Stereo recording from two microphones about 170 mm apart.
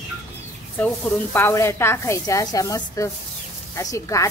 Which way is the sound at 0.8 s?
10° left (ahead or behind).